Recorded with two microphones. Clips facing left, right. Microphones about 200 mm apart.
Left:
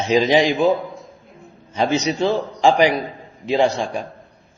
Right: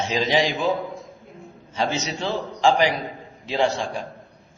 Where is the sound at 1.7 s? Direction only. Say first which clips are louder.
Left 6 dB; 15° left (ahead or behind).